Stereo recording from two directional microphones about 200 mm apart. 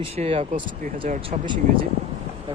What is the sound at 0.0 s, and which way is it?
Speech, 30° right (ahead or behind).